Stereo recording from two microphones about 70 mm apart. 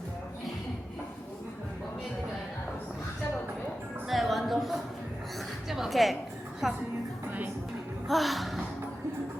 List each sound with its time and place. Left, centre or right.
4.1 s a sound: centre
6.6 s speech: centre
8.0 s speech: centre